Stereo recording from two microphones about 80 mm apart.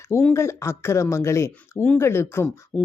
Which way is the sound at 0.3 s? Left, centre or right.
Left.